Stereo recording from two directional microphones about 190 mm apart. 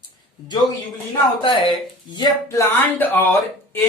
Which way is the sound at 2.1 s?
15° left (ahead or behind).